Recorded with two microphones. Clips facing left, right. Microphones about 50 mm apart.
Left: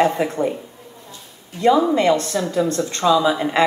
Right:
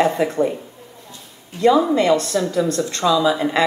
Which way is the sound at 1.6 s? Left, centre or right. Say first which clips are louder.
Right 1 dB; left.